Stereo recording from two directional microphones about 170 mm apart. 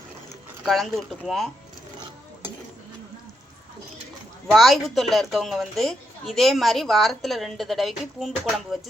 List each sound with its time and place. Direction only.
0.6 s a woman's voice: centre (ahead or behind)
4.5 s a woman's voice: centre (ahead or behind)